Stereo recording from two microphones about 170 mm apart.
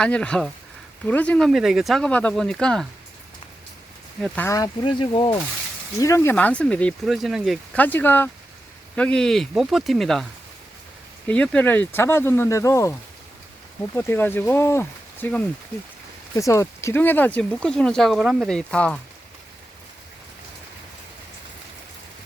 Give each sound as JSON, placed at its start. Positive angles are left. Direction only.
{"t": 0.0, "sound": "speech", "side_deg": 5}
{"t": 4.4, "sound": "speech", "side_deg": 20}
{"t": 6.0, "sound": "speech", "side_deg": 15}
{"t": 7.8, "sound": "speech", "side_deg": 10}
{"t": 11.3, "sound": "speech", "side_deg": 5}